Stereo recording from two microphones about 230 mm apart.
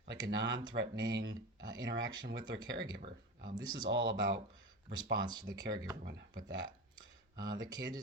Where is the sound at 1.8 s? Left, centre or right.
Right.